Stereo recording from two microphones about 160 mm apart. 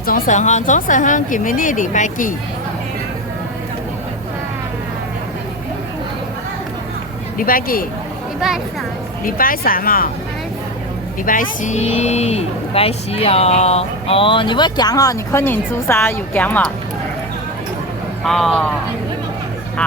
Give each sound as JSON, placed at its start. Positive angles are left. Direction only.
{"t": 0.0, "sound": "speech", "side_deg": 55}
{"t": 7.3, "sound": "speech", "side_deg": 65}
{"t": 9.2, "sound": "speech", "side_deg": 60}
{"t": 11.3, "sound": "speech", "side_deg": 55}
{"t": 18.3, "sound": "speech", "side_deg": 0}